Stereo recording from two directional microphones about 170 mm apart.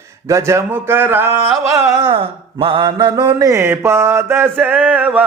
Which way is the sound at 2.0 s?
30° right (ahead or behind).